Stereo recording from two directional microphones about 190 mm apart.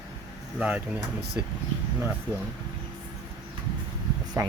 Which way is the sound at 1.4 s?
15° right (ahead or behind).